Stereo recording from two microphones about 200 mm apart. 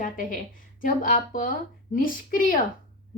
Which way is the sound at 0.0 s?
45° left (ahead or behind).